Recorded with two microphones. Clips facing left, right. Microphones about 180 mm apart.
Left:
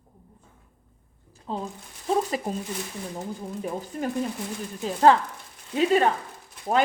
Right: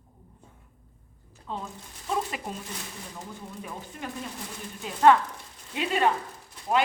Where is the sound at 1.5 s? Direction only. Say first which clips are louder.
Left 4 dB; 35° left (ahead or behind).